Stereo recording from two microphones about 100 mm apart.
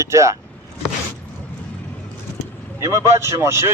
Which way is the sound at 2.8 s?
30° right (ahead or behind).